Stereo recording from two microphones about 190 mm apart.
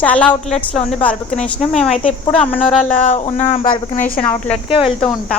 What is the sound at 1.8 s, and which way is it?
Speech, 35° left (ahead or behind).